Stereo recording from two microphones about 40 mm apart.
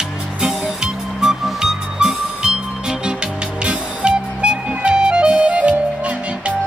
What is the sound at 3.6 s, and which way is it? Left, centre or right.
Music, right.